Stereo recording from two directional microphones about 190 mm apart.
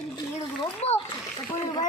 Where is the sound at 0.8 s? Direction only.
35° left (ahead or behind).